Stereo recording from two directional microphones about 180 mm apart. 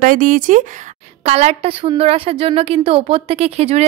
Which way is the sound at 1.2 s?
35° right (ahead or behind).